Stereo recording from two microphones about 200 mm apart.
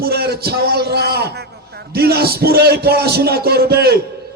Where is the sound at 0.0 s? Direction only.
50° right (ahead or behind).